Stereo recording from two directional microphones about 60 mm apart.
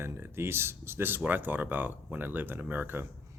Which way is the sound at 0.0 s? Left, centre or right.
Right.